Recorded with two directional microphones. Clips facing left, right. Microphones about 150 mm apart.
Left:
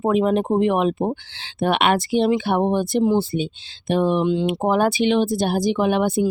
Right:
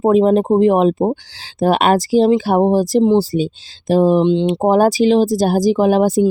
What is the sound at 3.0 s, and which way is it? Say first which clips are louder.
Speech: right 5 dB; 25° right (ahead or behind).